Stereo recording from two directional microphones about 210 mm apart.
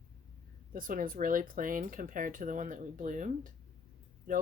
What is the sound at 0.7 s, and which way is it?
Speech, 40° right (ahead or behind).